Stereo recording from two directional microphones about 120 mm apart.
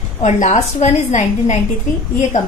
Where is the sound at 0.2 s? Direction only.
80° left.